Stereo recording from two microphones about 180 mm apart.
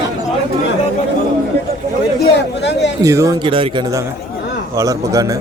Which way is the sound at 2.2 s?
75° left (ahead or behind).